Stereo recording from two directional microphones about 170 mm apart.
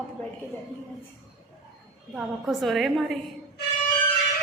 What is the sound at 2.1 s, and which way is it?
A woman's voice, centre (ahead or behind).